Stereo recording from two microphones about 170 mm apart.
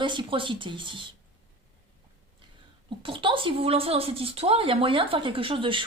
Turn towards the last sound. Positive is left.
turn(degrees=-30)  # may be behind; listen again after turning